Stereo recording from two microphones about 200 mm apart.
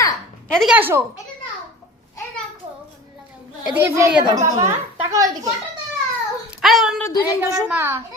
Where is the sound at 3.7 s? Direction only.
10° right (ahead or behind).